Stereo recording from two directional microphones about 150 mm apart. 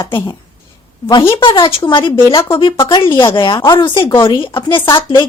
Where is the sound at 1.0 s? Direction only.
20° left (ahead or behind).